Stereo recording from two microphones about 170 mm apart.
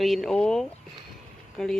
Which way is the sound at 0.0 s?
Centre (ahead or behind).